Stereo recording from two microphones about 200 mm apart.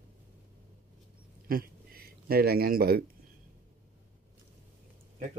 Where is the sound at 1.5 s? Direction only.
50° right (ahead or behind).